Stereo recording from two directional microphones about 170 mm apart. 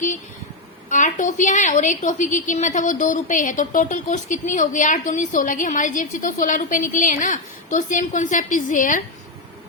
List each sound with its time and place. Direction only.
0.9 s a woman's voice: 50° left (ahead or behind)